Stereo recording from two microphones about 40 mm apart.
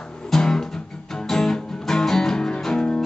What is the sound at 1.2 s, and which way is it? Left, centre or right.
Music, centre.